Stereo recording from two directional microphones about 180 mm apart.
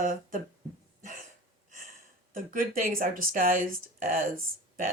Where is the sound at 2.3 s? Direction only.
50° right (ahead or behind).